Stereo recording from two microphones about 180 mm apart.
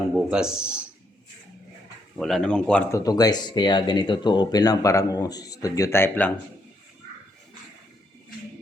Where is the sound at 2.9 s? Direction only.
20° left (ahead or behind).